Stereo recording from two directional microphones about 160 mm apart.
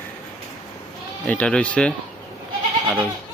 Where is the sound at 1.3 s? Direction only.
5° left (ahead or behind).